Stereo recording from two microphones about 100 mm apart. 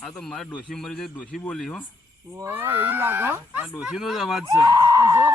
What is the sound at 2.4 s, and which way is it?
Speech, 20° right (ahead or behind).